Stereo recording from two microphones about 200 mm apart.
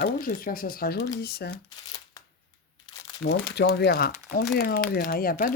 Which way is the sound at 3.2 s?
70° left (ahead or behind).